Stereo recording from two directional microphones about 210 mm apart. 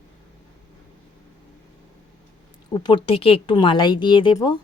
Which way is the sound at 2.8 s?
25° left (ahead or behind).